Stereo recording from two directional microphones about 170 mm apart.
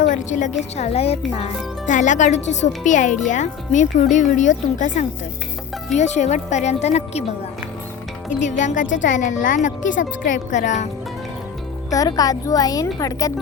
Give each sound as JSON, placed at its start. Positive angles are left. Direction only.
{"t": 0.0, "sound": "a woman's voice", "side_deg": 45}
{"t": 1.9, "sound": "speech", "side_deg": 45}
{"t": 8.4, "sound": "speech", "side_deg": 45}
{"t": 11.9, "sound": "speech", "side_deg": 20}